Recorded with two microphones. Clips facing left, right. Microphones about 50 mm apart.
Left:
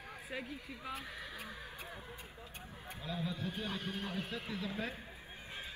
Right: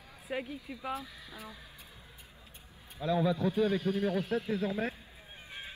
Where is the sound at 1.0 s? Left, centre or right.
Left.